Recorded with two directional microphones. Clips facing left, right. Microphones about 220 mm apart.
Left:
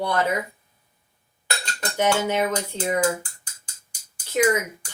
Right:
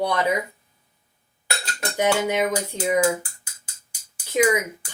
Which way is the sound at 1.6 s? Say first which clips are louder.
Right 1 dB; 5° right (ahead or behind).